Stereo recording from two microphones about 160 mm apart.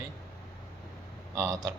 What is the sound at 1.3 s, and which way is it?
Speech, 20° right (ahead or behind).